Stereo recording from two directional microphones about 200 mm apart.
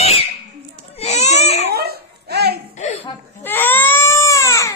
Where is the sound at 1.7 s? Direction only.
50° right (ahead or behind).